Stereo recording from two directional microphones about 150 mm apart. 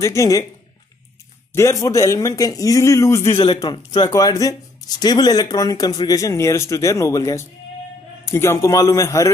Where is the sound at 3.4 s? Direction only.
30° left (ahead or behind).